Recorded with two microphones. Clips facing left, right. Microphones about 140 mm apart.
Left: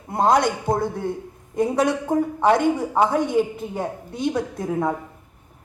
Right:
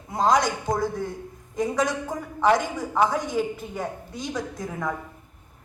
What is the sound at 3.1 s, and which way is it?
Speech, 60° left (ahead or behind).